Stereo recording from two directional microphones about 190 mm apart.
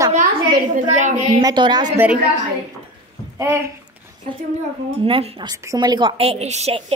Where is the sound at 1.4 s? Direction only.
20° right (ahead or behind).